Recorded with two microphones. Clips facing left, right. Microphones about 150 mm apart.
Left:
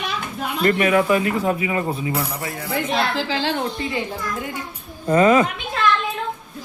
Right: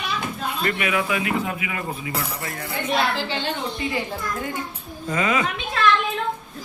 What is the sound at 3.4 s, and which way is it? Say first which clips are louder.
Speech: left 5 dB; 90° left.